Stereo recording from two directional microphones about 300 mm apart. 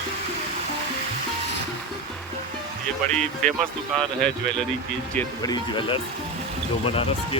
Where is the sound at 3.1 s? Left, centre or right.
Centre.